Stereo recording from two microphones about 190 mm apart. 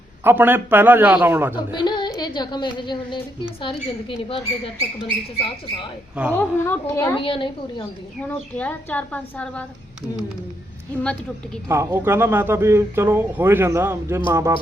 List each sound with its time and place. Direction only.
0.3 s a man's voice: 10° right (ahead or behind)
1.5 s a woman's voice: 25° left (ahead or behind)
6.3 s a woman's voice: 10° left (ahead or behind)
7.2 s a woman's voice: 25° left (ahead or behind)
8.2 s a woman's voice: 5° left (ahead or behind)
11.7 s a man's voice: 15° right (ahead or behind)